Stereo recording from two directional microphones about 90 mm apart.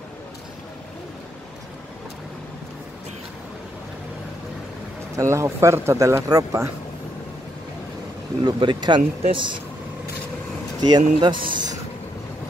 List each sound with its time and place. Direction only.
5.1 s speech: 35° right (ahead or behind)
8.5 s speech: 60° right (ahead or behind)
10.8 s speech: 55° right (ahead or behind)